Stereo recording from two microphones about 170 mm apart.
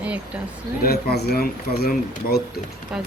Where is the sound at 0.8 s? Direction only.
70° left (ahead or behind).